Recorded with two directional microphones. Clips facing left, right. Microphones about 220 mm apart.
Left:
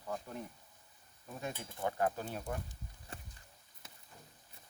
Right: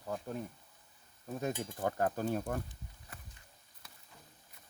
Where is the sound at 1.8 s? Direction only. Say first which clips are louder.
Right 1 dB; 45° right (ahead or behind).